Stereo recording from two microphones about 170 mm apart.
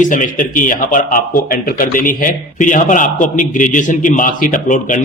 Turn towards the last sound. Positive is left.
turn(degrees=50)  # may be behind; listen again after turning